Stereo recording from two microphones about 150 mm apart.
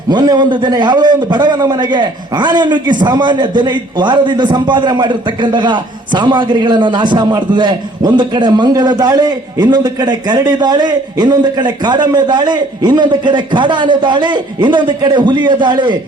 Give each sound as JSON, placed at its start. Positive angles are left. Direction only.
{"t": 0.1, "sound": "a man's voice", "side_deg": -30}